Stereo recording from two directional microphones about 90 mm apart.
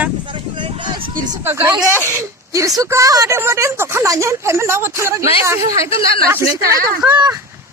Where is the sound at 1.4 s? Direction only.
25° right (ahead or behind).